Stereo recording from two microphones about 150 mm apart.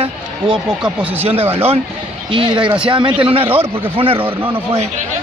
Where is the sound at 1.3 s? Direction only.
40° right (ahead or behind).